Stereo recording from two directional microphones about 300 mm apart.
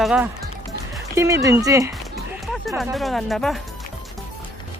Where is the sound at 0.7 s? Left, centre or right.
Centre.